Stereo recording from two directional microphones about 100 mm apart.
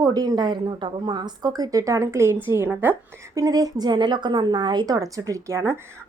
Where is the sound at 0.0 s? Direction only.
40° right (ahead or behind); by 2.9 s 20° right (ahead or behind).